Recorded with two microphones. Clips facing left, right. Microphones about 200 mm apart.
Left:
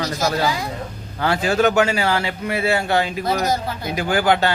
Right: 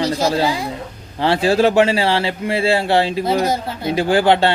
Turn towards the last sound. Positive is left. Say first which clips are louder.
# right 4 dB
turn(degrees=-30)  # may be behind; listen again after turning